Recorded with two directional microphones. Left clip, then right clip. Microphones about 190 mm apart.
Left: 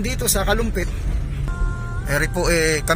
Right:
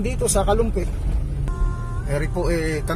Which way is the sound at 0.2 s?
35° left (ahead or behind).